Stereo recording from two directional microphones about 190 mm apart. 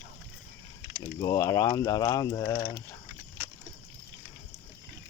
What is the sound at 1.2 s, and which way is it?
Speech, 20° left (ahead or behind).